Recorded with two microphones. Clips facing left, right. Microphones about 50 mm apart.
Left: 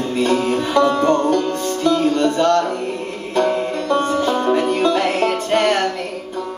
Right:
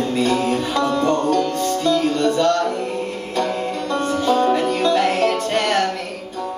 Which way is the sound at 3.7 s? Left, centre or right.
Left.